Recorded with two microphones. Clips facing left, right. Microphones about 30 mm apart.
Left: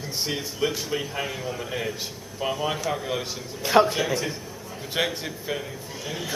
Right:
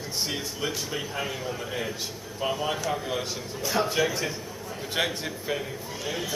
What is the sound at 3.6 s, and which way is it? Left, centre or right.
Speech, left.